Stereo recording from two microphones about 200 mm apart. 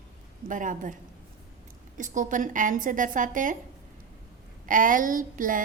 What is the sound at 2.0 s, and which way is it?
A woman's voice, 40° right (ahead or behind).